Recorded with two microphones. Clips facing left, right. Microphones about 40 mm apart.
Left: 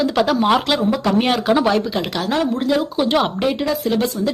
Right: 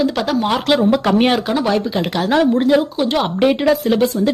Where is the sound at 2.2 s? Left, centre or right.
Right.